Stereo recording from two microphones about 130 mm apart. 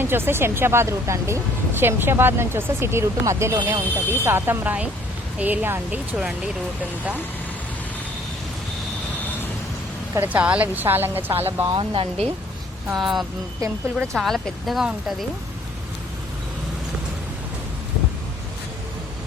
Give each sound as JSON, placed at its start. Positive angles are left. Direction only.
{"t": 0.0, "sound": "a woman's voice", "side_deg": -15}
{"t": 10.2, "sound": "a woman's voice", "side_deg": -15}
{"t": 11.6, "sound": "speech", "side_deg": -40}
{"t": 12.9, "sound": "speech", "side_deg": 0}